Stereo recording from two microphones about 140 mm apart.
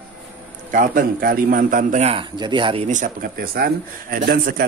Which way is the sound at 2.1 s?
35° right (ahead or behind).